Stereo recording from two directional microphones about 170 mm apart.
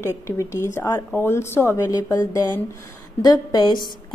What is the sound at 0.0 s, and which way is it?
A woman's voice, 15° left (ahead or behind).